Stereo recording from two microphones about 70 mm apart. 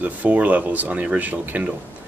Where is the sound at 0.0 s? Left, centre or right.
Right.